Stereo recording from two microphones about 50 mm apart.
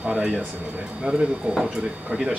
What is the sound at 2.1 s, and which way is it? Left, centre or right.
Speech, right.